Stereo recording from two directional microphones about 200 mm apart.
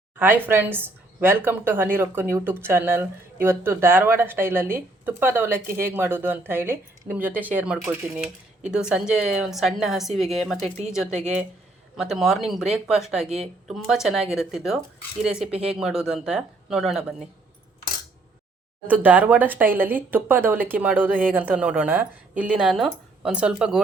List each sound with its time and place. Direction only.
0.2 s a woman's voice: 10° right (ahead or behind)
11.1 s a woman's voice: 35° right (ahead or behind)
11.9 s a woman's voice: centre (ahead or behind)
18.9 s speech: 10° right (ahead or behind)